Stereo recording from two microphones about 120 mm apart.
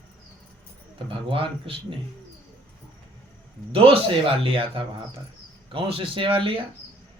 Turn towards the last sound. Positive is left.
turn(degrees=-50)  # may be behind; listen again after turning